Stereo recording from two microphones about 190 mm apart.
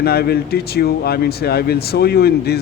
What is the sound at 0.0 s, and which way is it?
Speech, 55° left (ahead or behind).